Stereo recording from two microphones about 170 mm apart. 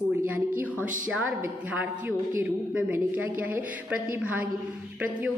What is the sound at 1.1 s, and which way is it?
A woman's voice, 10° right (ahead or behind).